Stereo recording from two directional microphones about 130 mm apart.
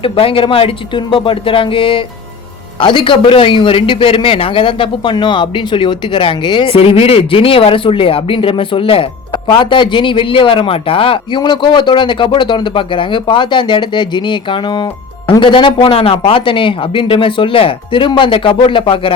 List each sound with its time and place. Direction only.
0.0 s speech: 45° left (ahead or behind)